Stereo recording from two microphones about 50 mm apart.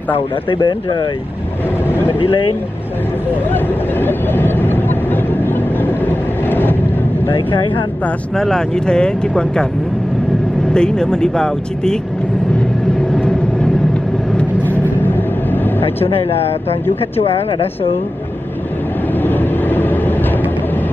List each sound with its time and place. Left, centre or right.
1.9 s vehicle: left
3.5 s vehicle: left
8.4 s speech: centre
10.7 s speech: centre
14.7 s vehicle: left
19.2 s vehicle: left